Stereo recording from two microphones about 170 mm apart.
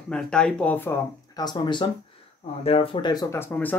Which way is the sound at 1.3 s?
25° left (ahead or behind).